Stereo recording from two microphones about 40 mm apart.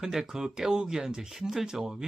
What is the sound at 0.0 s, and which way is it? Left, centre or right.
Speech, centre.